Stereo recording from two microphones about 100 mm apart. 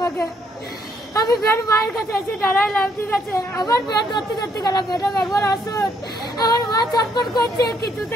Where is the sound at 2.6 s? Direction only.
5° left (ahead or behind).